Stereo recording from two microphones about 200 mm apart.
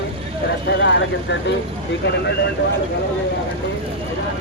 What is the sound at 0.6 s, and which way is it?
Vehicle, 65° left (ahead or behind).